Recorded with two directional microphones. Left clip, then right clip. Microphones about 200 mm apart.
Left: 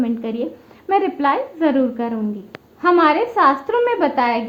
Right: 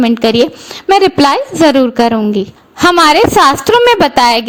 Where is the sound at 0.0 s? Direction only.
50° right (ahead or behind).